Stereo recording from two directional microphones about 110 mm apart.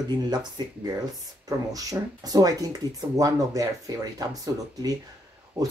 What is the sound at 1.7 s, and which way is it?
Speech, 35° right (ahead or behind).